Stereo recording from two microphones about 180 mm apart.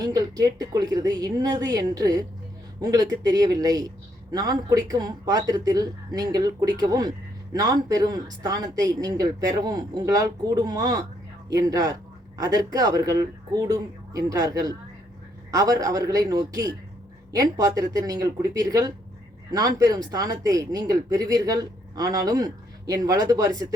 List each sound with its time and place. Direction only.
0.0 s speech: 20° right (ahead or behind)